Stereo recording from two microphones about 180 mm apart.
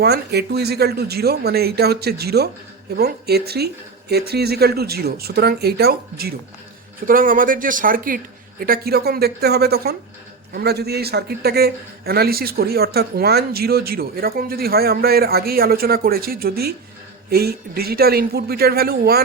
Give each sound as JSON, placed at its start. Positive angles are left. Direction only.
{"t": 0.0, "sound": "a man's voice", "side_deg": -65}